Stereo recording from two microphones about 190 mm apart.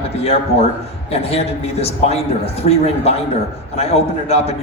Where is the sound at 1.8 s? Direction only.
35° left (ahead or behind).